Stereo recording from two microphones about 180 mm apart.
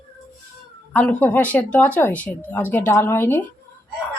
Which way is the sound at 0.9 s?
10° left (ahead or behind).